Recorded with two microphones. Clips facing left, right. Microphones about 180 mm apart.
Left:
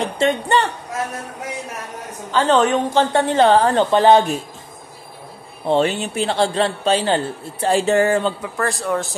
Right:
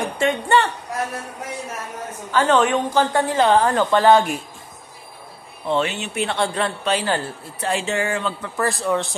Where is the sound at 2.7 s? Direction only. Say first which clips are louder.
Left 2 dB; 25° left (ahead or behind).